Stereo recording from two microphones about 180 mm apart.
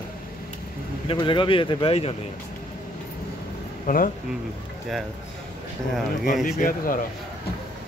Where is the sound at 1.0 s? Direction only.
25° left (ahead or behind).